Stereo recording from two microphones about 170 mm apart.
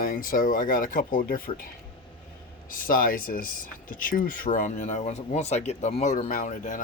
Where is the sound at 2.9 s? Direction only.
55° left (ahead or behind).